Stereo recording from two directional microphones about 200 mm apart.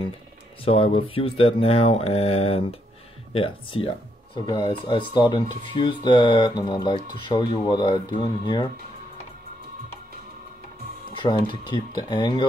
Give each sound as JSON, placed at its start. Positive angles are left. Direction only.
{"t": 0.7, "sound": "speech", "side_deg": 30}
{"t": 11.2, "sound": "speech", "side_deg": 25}